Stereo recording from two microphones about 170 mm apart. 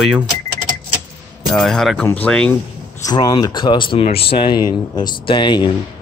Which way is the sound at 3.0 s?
20° left (ahead or behind).